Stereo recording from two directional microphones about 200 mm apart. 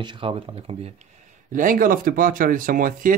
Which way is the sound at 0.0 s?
25° right (ahead or behind).